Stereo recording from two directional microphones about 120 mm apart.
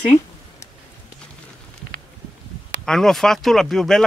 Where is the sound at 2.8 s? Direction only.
5° left (ahead or behind).